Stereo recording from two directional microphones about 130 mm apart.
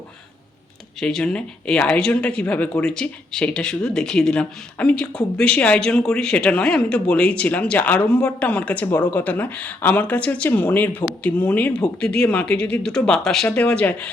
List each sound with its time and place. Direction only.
0.9 s speech: 5° left (ahead or behind)